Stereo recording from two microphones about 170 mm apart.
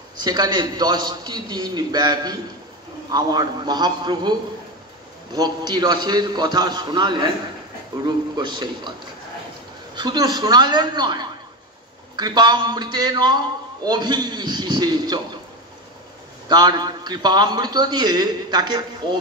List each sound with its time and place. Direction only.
0.2 s a man's voice: 25° right (ahead or behind)
5.3 s a man's voice: 25° right (ahead or behind)
9.9 s a man's voice: 25° right (ahead or behind)
16.4 s a man's voice: 25° right (ahead or behind)